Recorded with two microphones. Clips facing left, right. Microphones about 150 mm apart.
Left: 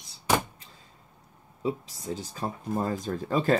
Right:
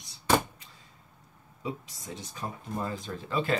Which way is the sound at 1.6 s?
30° left (ahead or behind).